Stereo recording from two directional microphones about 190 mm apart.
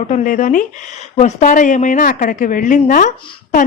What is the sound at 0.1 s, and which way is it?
Speech, 40° left (ahead or behind).